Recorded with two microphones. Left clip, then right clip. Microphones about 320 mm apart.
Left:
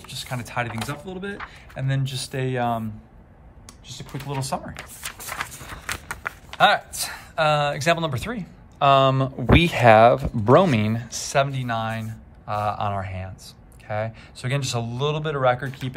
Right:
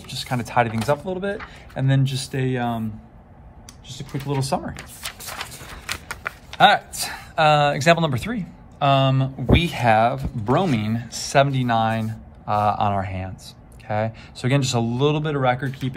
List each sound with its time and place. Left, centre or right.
0.0 s speech: centre
3.9 s speech: centre